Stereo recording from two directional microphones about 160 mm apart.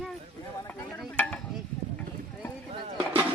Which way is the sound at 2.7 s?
30° right (ahead or behind).